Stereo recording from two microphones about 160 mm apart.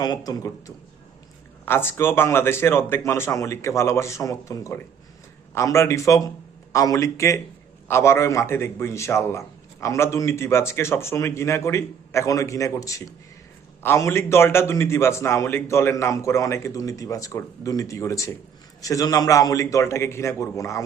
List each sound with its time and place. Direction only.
0.0 s a man's voice: 25° left (ahead or behind)
1.6 s a man's voice: 15° left (ahead or behind)